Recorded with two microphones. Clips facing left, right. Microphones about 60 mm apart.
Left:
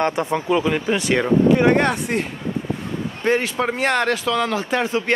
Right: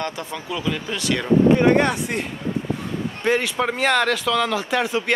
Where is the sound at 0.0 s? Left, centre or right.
Left.